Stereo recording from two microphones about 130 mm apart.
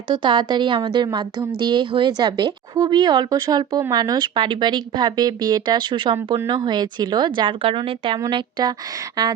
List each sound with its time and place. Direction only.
0.1 s a woman's voice: 35° right (ahead or behind)
6.3 s a woman's voice: 25° right (ahead or behind)